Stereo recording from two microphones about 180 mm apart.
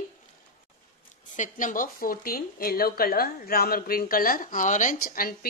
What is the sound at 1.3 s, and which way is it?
Speech, 45° left (ahead or behind).